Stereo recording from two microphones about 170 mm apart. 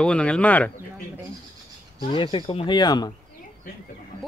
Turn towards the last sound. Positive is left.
turn(degrees=25)  # may be behind; listen again after turning